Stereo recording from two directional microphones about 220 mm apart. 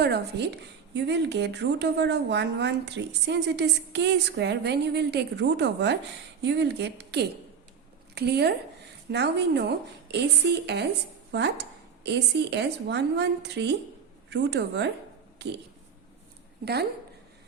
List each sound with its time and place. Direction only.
0.0 s a woman's voice: 50° right (ahead or behind)